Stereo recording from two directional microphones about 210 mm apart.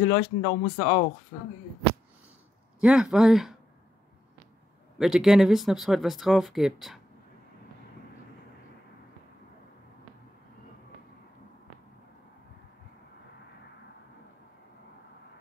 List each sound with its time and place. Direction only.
0.1 s speech: 30° left (ahead or behind)
2.8 s speech: 5° right (ahead or behind)
4.9 s speech: centre (ahead or behind)